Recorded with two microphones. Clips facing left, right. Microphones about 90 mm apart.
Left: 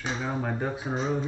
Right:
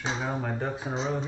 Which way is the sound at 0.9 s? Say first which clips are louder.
Left 3 dB; 20° right (ahead or behind).